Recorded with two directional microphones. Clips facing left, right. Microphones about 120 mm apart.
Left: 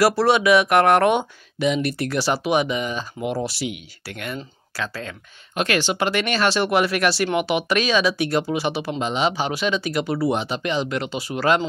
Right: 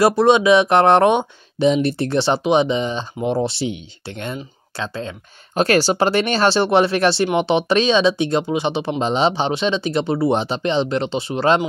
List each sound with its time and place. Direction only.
0.0 s speech: 20° right (ahead or behind)
5.5 s speech: 35° right (ahead or behind)